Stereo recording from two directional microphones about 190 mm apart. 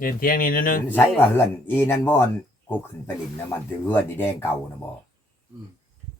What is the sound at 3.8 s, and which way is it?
Speech, 10° left (ahead or behind).